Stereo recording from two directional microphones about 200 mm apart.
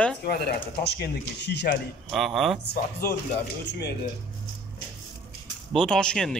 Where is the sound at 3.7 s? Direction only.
55° left (ahead or behind).